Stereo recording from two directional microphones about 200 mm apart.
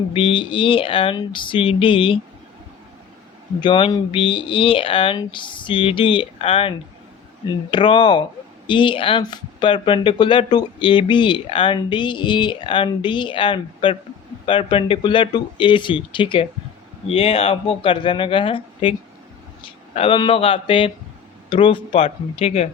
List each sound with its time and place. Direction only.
0.1 s speech: 25° left (ahead or behind)
3.6 s speech: 25° left (ahead or behind)